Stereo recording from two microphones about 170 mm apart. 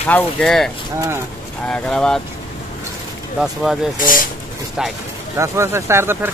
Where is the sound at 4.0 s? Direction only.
55° left (ahead or behind).